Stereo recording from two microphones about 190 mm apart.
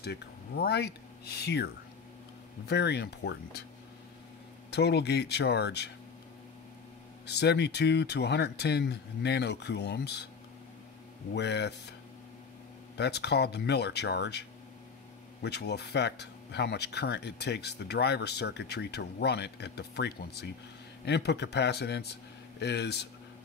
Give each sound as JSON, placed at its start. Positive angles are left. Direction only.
{"t": 0.0, "sound": "speech", "side_deg": 55}
{"t": 2.7, "sound": "speech", "side_deg": 60}
{"t": 4.6, "sound": "speech", "side_deg": 60}
{"t": 7.2, "sound": "speech", "side_deg": 60}
{"t": 11.3, "sound": "speech", "side_deg": 65}
{"t": 12.9, "sound": "speech", "side_deg": 60}
{"t": 15.4, "sound": "speech", "side_deg": 60}